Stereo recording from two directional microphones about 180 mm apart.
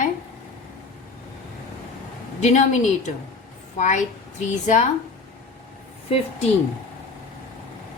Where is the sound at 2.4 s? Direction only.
40° left (ahead or behind).